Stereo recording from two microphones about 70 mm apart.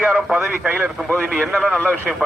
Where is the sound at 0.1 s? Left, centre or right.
Centre.